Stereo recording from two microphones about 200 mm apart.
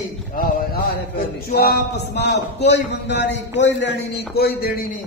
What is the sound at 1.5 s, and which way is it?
Speech, 55° left (ahead or behind).